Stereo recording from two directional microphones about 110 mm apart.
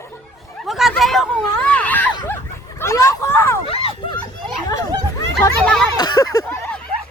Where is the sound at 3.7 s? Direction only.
55° left (ahead or behind).